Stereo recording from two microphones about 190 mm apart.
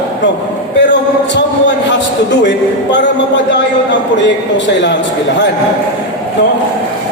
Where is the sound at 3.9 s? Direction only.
70° left (ahead or behind).